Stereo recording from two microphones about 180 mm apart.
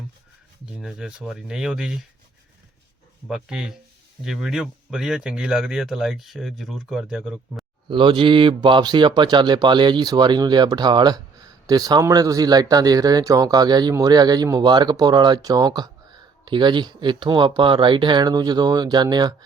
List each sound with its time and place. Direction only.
0.6 s speech: 5° right (ahead or behind)
3.2 s speech: 5° right (ahead or behind)
7.9 s speech: 25° right (ahead or behind)